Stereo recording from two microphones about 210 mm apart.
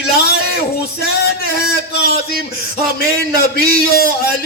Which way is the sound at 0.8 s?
45° left (ahead or behind).